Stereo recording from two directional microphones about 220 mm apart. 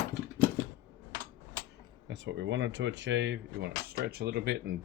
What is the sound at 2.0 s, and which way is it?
Speech, 55° right (ahead or behind).